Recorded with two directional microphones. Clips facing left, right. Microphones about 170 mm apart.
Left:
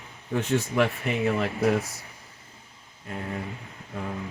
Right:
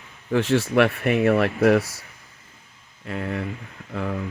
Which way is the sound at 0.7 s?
70° right (ahead or behind).